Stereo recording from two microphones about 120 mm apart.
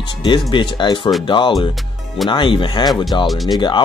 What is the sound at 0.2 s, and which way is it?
Speech, 40° left (ahead or behind).